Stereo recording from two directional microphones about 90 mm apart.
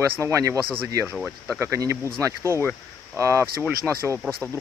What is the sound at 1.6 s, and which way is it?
Speech, 35° right (ahead or behind).